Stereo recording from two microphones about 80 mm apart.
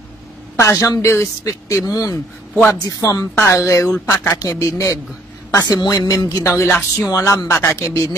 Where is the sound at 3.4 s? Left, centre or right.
Left.